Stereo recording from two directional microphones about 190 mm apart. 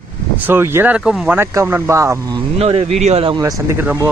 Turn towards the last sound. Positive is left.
turn(degrees=-35)  # may be behind; listen again after turning